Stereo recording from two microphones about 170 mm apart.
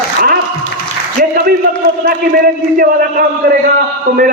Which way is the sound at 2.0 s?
55° right (ahead or behind).